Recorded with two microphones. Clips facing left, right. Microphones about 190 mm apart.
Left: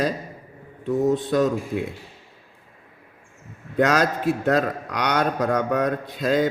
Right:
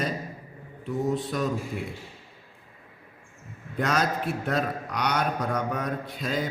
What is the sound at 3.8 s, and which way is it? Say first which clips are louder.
Speech: left 7 dB; 90° left.